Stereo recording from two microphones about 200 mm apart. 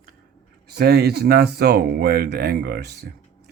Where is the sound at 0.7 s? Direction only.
55° right (ahead or behind).